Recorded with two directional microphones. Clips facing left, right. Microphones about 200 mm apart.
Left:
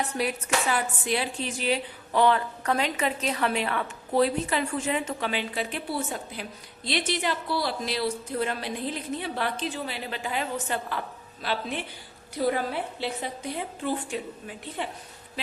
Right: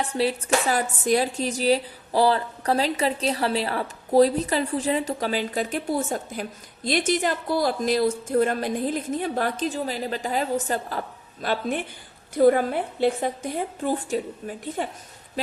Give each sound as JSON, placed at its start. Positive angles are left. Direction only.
{"t": 0.1, "sound": "a woman's voice", "side_deg": -30}